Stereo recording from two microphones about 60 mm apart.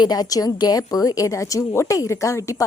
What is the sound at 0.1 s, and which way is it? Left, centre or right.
A woman's voice, left.